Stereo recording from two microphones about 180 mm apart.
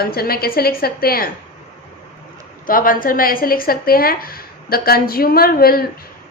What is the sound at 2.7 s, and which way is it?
A woman's voice, 50° left (ahead or behind).